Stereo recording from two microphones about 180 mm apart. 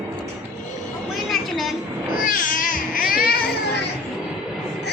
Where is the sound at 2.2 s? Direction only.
50° left (ahead or behind).